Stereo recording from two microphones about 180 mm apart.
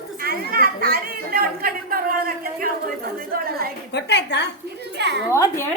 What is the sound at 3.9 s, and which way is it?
Speech, 70° left (ahead or behind).